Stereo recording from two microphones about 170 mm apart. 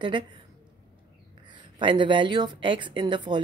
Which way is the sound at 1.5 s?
30° right (ahead or behind).